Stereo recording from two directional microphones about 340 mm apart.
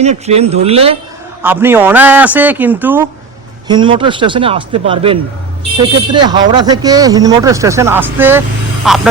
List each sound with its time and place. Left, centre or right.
0.0 s speech: centre
1.4 s speech: centre